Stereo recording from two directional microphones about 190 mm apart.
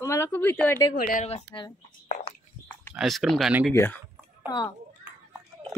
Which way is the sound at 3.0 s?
Centre (ahead or behind).